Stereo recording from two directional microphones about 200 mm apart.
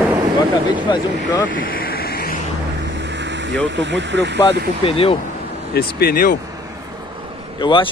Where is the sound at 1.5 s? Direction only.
45° left (ahead or behind).